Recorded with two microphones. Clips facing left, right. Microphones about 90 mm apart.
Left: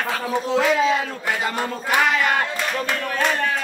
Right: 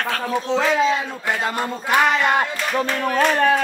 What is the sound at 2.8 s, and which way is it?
Speech, 30° right (ahead or behind).